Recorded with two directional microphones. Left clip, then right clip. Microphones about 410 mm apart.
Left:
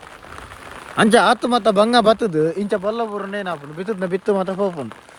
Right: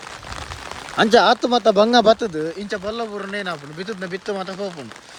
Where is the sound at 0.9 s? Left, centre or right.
Centre.